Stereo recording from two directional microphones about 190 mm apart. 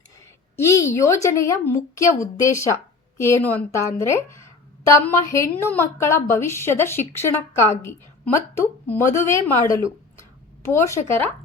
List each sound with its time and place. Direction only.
0.5 s a woman's voice: 15° left (ahead or behind)